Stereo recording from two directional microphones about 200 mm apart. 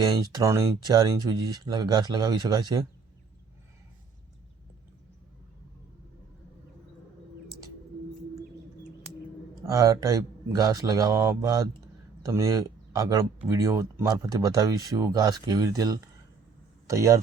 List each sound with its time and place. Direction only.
0.0 s speech: 20° right (ahead or behind)
9.6 s speech: 15° right (ahead or behind)